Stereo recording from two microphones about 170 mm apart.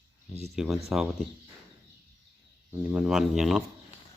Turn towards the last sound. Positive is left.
turn(degrees=0)  # may be behind; listen again after turning